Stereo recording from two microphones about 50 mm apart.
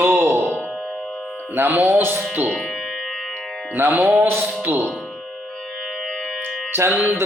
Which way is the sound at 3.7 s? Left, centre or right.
Right.